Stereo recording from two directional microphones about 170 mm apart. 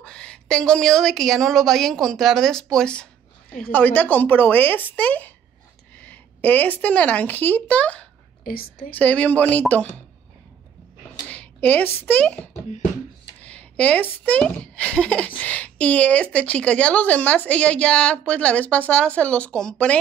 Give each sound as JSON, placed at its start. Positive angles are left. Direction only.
{"t": 0.0, "sound": "a woman's voice", "side_deg": 5}
{"t": 8.5, "sound": "a woman's voice", "side_deg": 60}
{"t": 8.9, "sound": "a child's voice", "side_deg": 10}
{"t": 11.2, "sound": "speech", "side_deg": 10}
{"t": 13.4, "sound": "a sound", "side_deg": 5}
{"t": 14.2, "sound": "a child's voice", "side_deg": 5}